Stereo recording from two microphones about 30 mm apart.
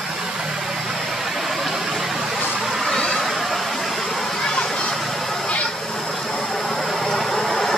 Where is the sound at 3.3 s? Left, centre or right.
Centre.